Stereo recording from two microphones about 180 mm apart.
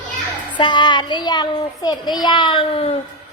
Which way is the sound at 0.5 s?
25° left (ahead or behind).